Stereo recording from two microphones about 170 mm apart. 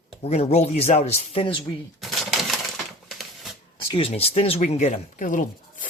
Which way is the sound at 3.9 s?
35° left (ahead or behind).